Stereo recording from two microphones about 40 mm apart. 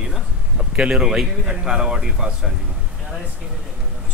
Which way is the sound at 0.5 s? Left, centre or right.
Right.